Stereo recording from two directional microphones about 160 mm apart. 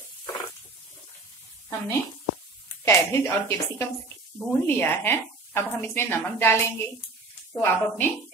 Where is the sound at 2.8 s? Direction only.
15° left (ahead or behind).